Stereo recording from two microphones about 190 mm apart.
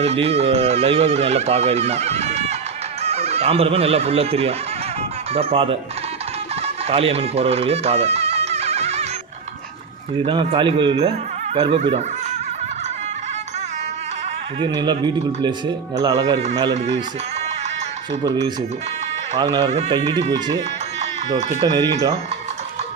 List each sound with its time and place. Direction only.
0.0 s speech: 35° right (ahead or behind)
6.8 s music: 30° right (ahead or behind)
10.2 s speech: 25° right (ahead or behind)
14.8 s speech: 25° right (ahead or behind)
18.1 s speech: 70° right (ahead or behind)
19.4 s speech: 20° right (ahead or behind)
21.0 s music: 35° right (ahead or behind)